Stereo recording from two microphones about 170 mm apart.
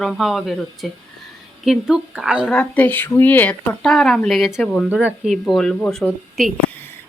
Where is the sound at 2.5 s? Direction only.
10° left (ahead or behind).